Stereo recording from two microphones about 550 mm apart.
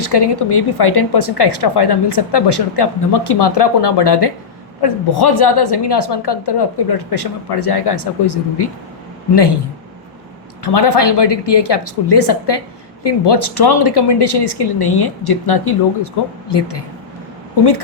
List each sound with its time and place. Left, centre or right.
0.0 s speech: left
10.6 s speech: left